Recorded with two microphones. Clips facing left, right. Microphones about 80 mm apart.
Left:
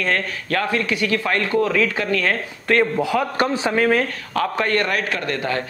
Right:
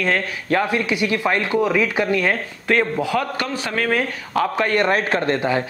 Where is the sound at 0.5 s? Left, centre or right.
Centre.